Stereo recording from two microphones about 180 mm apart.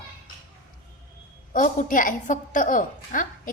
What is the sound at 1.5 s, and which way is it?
Speech, 45° left (ahead or behind).